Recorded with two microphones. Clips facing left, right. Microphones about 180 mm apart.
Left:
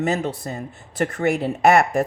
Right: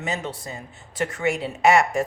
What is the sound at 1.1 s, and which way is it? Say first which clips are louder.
Speech: left 4 dB; 55° left (ahead or behind).